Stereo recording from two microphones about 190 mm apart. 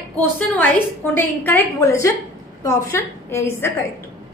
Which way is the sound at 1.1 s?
10° left (ahead or behind).